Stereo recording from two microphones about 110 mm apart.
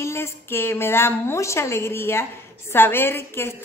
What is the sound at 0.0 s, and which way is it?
A woman's voice, 25° left (ahead or behind).